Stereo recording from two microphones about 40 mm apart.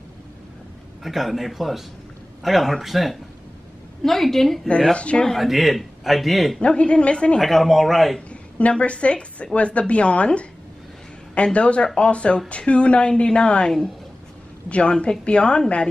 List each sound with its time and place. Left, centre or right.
1.0 s a man's voice: centre
4.9 s speech: left
5.4 s a man's voice: centre
6.6 s speech: left
7.3 s a man's voice: centre
8.3 s a woman's voice: left
14.7 s speech: left